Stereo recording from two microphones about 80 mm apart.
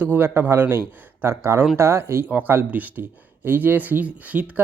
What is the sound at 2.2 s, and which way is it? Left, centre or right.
Speech, right.